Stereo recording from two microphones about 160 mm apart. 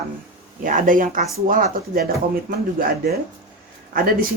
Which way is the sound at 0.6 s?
60° right (ahead or behind).